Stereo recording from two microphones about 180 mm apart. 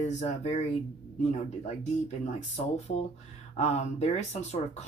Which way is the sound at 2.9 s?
45° left (ahead or behind).